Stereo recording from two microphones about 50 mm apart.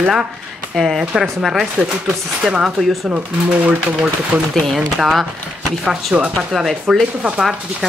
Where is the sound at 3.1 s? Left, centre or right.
Right.